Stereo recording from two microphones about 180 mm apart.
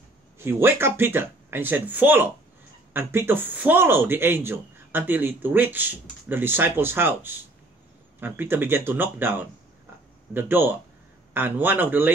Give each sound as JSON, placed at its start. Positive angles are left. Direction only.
{"t": 0.4, "sound": "speech", "side_deg": -15}